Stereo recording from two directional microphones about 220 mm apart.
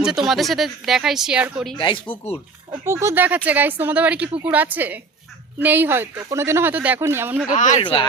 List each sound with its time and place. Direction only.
0.0 s speech: centre (ahead or behind)
1.8 s speech: 20° left (ahead or behind)
2.8 s speech: 10° right (ahead or behind)
7.5 s speech: 35° left (ahead or behind)
7.8 s speech: 25° left (ahead or behind)